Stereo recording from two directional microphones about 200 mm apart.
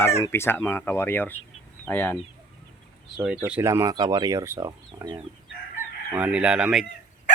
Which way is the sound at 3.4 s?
10° right (ahead or behind).